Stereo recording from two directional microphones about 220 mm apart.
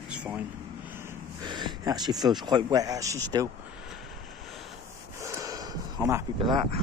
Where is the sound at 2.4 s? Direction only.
20° right (ahead or behind).